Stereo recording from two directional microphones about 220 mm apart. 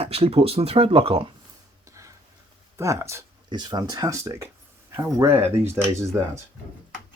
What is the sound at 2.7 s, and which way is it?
Speech, 10° right (ahead or behind).